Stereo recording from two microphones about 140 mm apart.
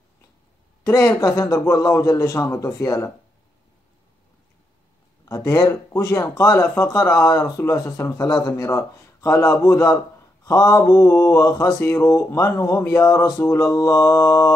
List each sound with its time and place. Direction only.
0.8 s speech: 20° left (ahead or behind)
5.2 s speech: 25° left (ahead or behind)